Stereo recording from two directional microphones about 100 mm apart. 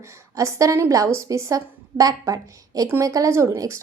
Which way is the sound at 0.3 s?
30° right (ahead or behind).